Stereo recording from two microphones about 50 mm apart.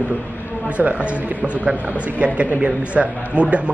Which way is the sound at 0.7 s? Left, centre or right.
Right.